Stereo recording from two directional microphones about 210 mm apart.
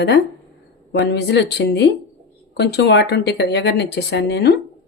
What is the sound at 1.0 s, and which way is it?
Speech, 55° left (ahead or behind).